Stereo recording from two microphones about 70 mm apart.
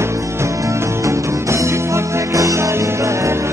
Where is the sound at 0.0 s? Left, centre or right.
Right.